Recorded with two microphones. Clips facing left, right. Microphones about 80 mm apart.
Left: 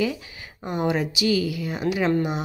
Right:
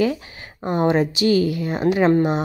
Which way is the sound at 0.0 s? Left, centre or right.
Right.